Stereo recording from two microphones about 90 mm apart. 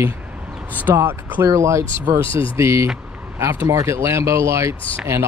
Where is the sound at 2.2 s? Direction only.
75° left (ahead or behind).